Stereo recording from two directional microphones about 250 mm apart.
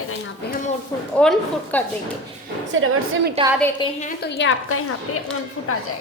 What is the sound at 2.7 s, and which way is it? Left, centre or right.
Speech, right.